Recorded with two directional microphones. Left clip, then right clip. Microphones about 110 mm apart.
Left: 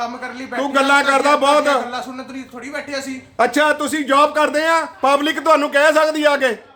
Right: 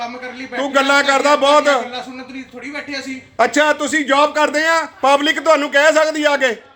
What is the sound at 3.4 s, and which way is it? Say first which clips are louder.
A man's voice: right 1 dB; 30° left (ahead or behind).